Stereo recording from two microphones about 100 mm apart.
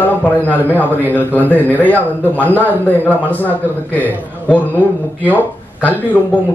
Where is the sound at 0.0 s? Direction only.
20° left (ahead or behind).